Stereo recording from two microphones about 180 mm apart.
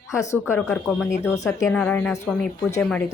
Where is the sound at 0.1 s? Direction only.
15° left (ahead or behind).